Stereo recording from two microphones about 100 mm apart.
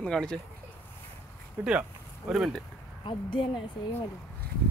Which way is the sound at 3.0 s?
55° left (ahead or behind).